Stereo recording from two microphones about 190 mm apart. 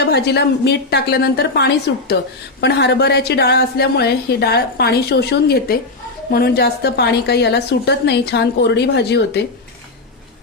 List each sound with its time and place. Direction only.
0.0 s a woman's voice: 60° left (ahead or behind)